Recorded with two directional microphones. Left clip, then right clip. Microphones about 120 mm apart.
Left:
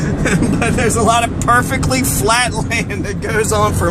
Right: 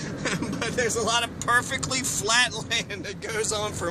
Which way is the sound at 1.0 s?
20° right (ahead or behind).